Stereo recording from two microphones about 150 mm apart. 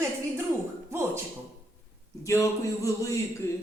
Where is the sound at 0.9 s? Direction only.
20° right (ahead or behind).